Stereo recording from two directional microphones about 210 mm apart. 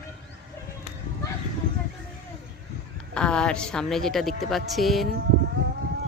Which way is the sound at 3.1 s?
5° left (ahead or behind).